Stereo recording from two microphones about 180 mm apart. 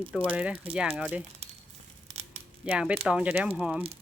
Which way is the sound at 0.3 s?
10° right (ahead or behind).